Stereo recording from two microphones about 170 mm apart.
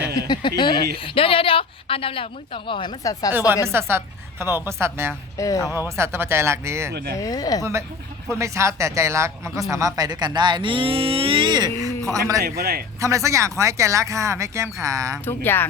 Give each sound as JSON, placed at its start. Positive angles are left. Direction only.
{"t": 0.2, "sound": "speech", "side_deg": 25}
{"t": 3.7, "sound": "speech", "side_deg": -15}
{"t": 5.4, "sound": "speech", "side_deg": 20}
{"t": 6.0, "sound": "speech", "side_deg": -15}
{"t": 6.9, "sound": "speech", "side_deg": -65}
{"t": 7.2, "sound": "speech", "side_deg": 20}
{"t": 7.6, "sound": "speech", "side_deg": -15}
{"t": 12.4, "sound": "a man's voice", "side_deg": -70}
{"t": 13.0, "sound": "speech", "side_deg": -20}
{"t": 15.2, "sound": "speech", "side_deg": 10}